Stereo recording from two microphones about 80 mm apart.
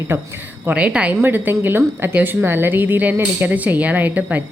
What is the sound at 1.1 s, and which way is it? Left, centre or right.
A woman's voice, right.